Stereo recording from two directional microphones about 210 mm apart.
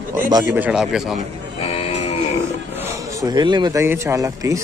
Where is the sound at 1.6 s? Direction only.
30° left (ahead or behind).